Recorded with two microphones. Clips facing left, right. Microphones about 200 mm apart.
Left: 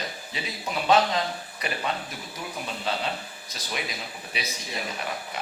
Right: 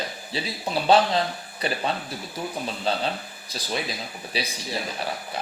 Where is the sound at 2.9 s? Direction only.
30° right (ahead or behind).